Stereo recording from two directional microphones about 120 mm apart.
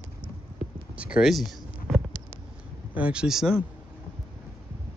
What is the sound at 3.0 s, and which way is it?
Speech, 10° right (ahead or behind).